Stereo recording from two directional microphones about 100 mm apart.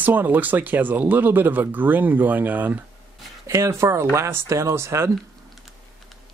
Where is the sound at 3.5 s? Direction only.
30° right (ahead or behind).